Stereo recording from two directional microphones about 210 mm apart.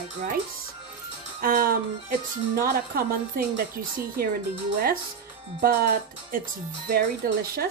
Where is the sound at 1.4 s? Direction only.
45° right (ahead or behind).